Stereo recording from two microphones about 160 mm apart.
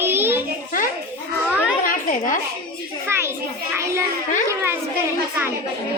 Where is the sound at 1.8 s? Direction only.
55° left (ahead or behind).